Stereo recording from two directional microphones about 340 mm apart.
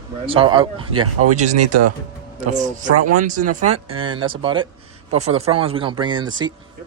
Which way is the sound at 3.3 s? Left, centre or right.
Right.